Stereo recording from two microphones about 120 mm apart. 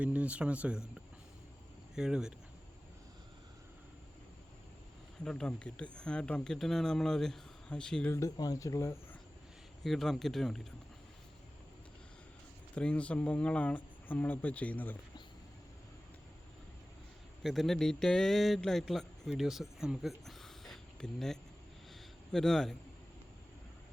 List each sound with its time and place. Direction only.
0.0 s speech: 10° right (ahead or behind)
2.0 s speech: 5° right (ahead or behind)
5.2 s speech: 5° left (ahead or behind)
8.1 s speech: 30° left (ahead or behind)
9.8 s speech: centre (ahead or behind)
12.7 s speech: 10° left (ahead or behind)
17.4 s a man's voice: centre (ahead or behind)